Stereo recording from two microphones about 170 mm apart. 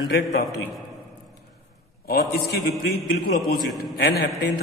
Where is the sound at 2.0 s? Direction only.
65° left (ahead or behind).